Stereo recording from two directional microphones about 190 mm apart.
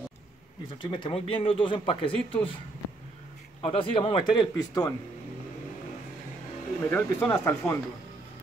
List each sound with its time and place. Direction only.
0.8 s speech: 25° left (ahead or behind)
3.6 s speech: 25° left (ahead or behind)
6.8 s speech: 15° left (ahead or behind)